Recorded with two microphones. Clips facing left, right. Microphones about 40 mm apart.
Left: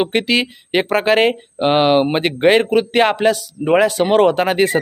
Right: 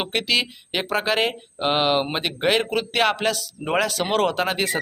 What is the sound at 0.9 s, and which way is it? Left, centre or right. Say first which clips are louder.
Speech: left 7 dB; left.